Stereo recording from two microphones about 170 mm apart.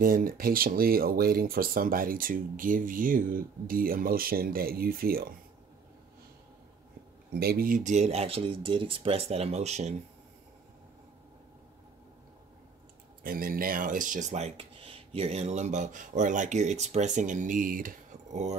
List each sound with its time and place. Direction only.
0.0 s speech: 55° right (ahead or behind)
7.3 s speech: 65° right (ahead or behind); by 9.9 s 40° right (ahead or behind)
13.2 s speech: 60° right (ahead or behind)